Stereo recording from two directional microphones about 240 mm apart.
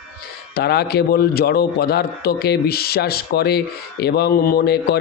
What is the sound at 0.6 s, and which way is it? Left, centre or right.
A man's voice, left.